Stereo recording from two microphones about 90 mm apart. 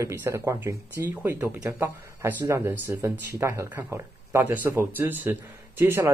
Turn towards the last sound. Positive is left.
turn(degrees=-25)  # may be behind; listen again after turning